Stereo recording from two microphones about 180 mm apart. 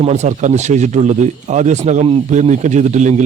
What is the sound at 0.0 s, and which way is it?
Speech, 40° right (ahead or behind).